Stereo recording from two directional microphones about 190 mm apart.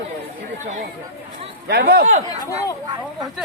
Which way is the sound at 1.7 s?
60° right (ahead or behind).